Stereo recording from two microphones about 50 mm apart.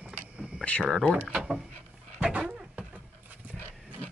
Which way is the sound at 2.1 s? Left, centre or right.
Right.